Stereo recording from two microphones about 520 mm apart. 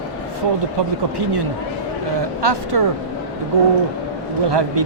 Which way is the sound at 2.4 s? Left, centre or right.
Right.